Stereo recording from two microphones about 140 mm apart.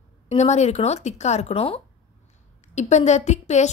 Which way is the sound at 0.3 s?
55° left (ahead or behind).